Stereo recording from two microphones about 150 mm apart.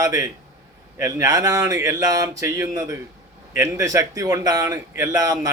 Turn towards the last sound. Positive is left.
turn(degrees=-20)  # may be behind; listen again after turning